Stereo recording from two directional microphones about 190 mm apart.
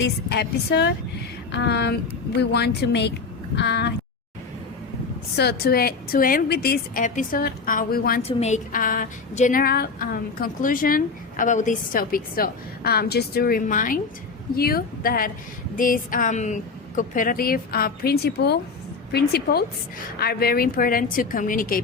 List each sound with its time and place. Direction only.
0.0 s a woman's voice: 60° left (ahead or behind)
5.4 s a woman's voice: 55° left (ahead or behind)
8.2 s a woman's voice: 35° left (ahead or behind)